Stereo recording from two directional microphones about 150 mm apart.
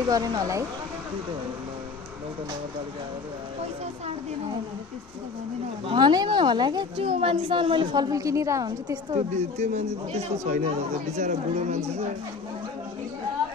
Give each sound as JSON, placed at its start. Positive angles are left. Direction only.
{"t": 0.1, "sound": "a woman's voice", "side_deg": -25}
{"t": 5.9, "sound": "speech", "side_deg": -30}
{"t": 7.1, "sound": "a woman's voice", "side_deg": -40}
{"t": 9.3, "sound": "speech", "side_deg": -50}